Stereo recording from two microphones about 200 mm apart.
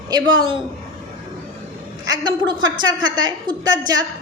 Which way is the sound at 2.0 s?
20° right (ahead or behind).